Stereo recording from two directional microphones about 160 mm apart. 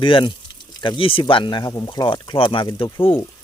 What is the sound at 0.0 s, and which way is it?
Speech, 30° left (ahead or behind).